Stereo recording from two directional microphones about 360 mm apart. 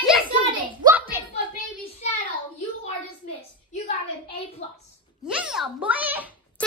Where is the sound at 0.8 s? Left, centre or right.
Centre.